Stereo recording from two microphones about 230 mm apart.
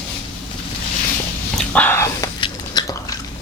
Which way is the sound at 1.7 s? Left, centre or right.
Centre.